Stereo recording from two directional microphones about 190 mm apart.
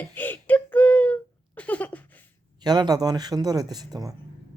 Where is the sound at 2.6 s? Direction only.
20° right (ahead or behind).